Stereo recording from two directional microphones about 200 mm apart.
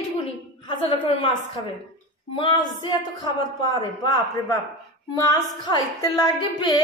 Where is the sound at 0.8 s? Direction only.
25° left (ahead or behind).